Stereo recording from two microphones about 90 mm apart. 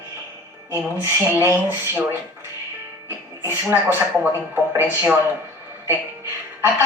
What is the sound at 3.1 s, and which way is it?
Speech, 30° right (ahead or behind).